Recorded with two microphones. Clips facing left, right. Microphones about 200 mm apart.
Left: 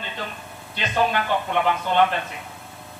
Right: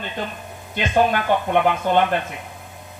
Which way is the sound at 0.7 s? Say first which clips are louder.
Right 4 dB; 50° right (ahead or behind).